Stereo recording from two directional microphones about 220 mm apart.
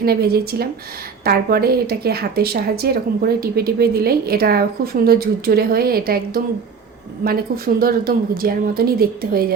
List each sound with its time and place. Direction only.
0.0 s speech: 45° right (ahead or behind)